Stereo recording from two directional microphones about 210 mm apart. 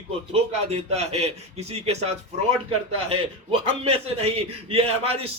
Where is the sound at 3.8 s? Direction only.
30° right (ahead or behind).